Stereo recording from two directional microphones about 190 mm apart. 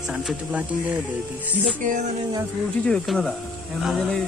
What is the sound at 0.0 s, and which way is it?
Speech, centre (ahead or behind).